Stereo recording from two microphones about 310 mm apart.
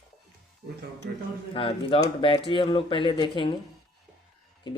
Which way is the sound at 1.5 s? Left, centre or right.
Centre.